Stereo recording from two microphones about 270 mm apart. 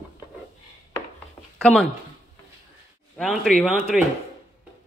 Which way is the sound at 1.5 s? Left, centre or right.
Centre.